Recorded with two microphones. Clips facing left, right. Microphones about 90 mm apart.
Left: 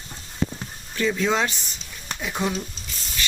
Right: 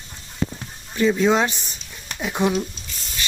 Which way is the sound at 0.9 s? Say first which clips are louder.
Right 5 dB; 20° right (ahead or behind).